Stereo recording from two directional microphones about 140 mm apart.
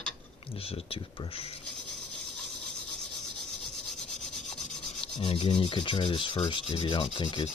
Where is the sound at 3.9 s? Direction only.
5° left (ahead or behind).